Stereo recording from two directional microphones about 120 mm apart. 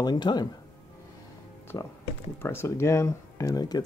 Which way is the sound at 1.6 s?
20° left (ahead or behind).